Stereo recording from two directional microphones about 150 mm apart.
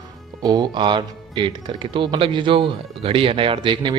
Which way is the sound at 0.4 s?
30° right (ahead or behind).